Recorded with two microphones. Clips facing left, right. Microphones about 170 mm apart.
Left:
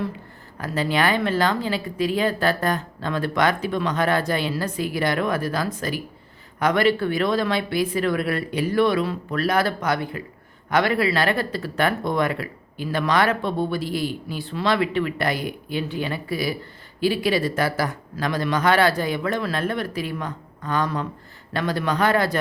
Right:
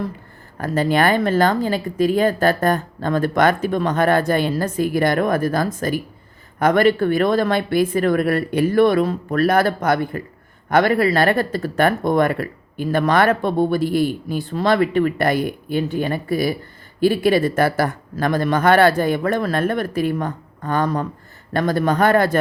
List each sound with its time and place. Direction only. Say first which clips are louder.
0.6 s speech: right 5 dB; 50° right (ahead or behind)